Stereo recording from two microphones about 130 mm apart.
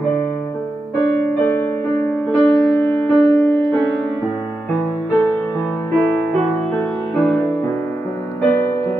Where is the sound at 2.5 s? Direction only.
25° left (ahead or behind).